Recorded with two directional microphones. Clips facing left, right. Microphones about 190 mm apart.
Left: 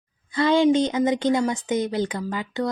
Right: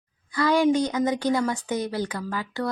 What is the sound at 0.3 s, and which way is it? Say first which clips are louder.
Speech: left 3 dB; 25° left (ahead or behind).